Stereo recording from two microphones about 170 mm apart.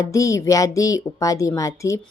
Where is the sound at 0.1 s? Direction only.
20° left (ahead or behind).